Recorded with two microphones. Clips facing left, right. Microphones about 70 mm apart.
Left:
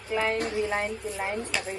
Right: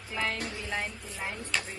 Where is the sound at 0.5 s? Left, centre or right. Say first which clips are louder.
Left 7 dB; left.